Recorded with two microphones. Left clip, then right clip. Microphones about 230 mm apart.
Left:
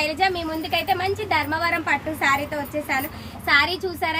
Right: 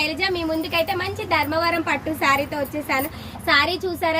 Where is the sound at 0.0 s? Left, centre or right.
Left.